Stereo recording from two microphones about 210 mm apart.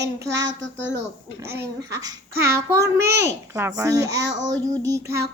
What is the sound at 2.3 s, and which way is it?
Child singing, 50° right (ahead or behind).